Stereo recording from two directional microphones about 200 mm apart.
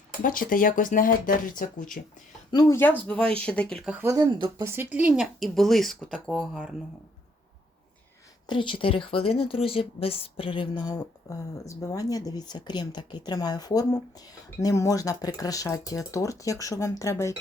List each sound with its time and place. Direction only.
0.2 s speech: 45° left (ahead or behind)
2.5 s speech: 15° left (ahead or behind)
4.0 s speech: 20° right (ahead or behind)
4.6 s speech: 10° right (ahead or behind)
8.4 s speech: 25° left (ahead or behind)